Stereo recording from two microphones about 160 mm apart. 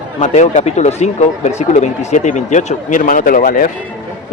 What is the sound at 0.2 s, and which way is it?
Speech, 45° left (ahead or behind).